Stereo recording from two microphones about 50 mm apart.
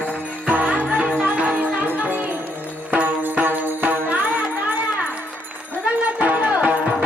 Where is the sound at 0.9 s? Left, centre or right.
Centre.